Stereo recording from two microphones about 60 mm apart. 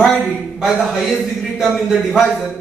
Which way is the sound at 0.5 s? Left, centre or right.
Centre.